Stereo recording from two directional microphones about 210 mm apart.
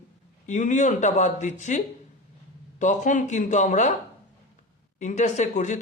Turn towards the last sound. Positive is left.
turn(degrees=35)  # may be behind; listen again after turning